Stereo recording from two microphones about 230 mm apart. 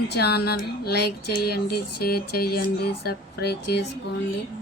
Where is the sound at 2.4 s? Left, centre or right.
Left.